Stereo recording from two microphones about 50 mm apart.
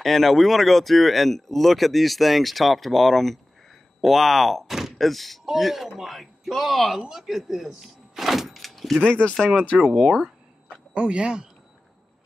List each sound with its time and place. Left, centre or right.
0.0 s speech: centre
9.0 s speech: centre
9.7 s speech: centre
11.0 s speech: centre